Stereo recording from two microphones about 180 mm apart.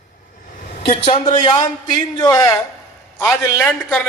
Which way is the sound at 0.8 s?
30° left (ahead or behind).